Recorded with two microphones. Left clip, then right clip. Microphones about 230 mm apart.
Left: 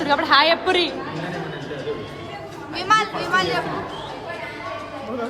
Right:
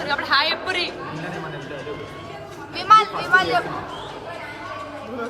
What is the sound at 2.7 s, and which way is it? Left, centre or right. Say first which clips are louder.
Speech: right 4 dB; centre.